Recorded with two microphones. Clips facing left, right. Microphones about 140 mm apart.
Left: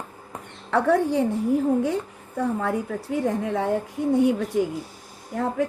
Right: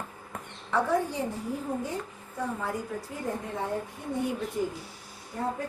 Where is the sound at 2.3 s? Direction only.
65° left (ahead or behind); by 4.6 s 85° left.